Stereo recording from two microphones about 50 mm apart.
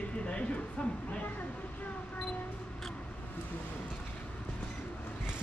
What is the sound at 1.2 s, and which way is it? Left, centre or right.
Speech, left.